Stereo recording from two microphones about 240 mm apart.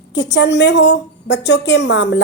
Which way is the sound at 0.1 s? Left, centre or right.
Left.